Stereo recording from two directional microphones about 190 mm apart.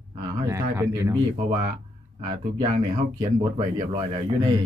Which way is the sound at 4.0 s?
25° right (ahead or behind).